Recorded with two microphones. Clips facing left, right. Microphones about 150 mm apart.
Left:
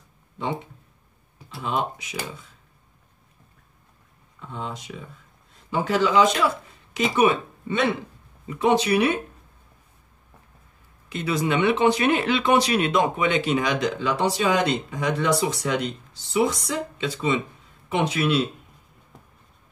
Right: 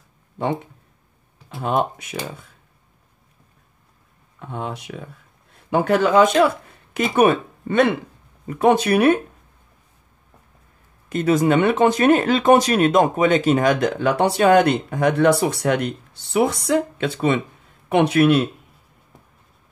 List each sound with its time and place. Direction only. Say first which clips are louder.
1.5 s speech: right 5 dB; 50° right (ahead or behind)
4.4 s speech: right 4 dB; 60° right (ahead or behind)
11.1 s speech: right 7 dB; 45° right (ahead or behind)